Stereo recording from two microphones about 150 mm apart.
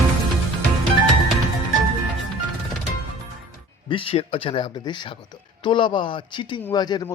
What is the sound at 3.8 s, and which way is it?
A man's voice, 35° left (ahead or behind).